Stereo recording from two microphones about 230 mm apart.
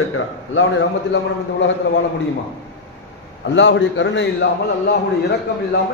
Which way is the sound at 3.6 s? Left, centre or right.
Left.